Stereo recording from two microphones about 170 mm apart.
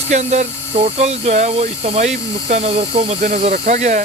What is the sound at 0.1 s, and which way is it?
Speech, 45° right (ahead or behind).